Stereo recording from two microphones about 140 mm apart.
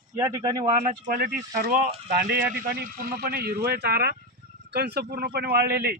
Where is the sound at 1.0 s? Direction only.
85° right.